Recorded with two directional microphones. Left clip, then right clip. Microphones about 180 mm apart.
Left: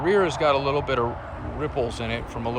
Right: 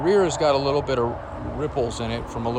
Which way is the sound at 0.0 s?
15° right (ahead or behind).